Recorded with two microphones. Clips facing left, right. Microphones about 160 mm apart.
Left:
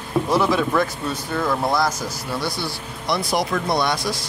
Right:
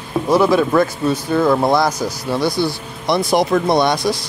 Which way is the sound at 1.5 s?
40° right (ahead or behind).